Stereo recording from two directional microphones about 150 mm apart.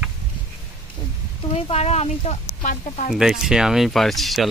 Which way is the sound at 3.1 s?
5° right (ahead or behind).